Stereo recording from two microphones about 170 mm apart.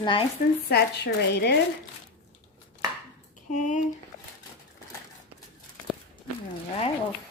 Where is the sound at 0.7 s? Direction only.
70° left (ahead or behind).